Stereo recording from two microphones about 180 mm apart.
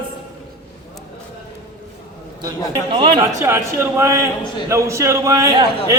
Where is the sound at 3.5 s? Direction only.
15° right (ahead or behind).